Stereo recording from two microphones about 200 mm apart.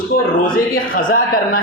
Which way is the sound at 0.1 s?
40° left (ahead or behind).